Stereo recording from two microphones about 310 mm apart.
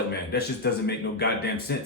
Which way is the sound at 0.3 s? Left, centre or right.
Left.